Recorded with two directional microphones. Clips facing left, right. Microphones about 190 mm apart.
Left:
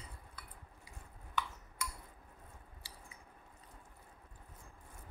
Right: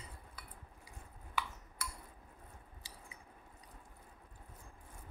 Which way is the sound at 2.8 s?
20° right (ahead or behind).